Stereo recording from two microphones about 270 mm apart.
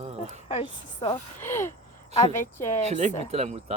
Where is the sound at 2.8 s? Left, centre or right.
Right.